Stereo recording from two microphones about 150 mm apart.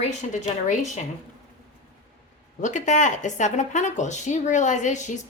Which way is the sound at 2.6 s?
55° left (ahead or behind).